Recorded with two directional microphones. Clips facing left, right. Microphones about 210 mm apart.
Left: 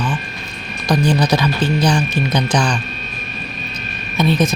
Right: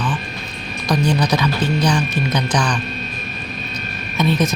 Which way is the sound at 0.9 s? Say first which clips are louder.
Left 2 dB; 30° left (ahead or behind).